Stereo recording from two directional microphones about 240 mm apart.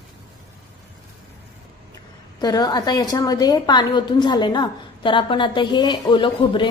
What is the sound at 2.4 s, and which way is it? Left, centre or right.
A woman's voice, centre.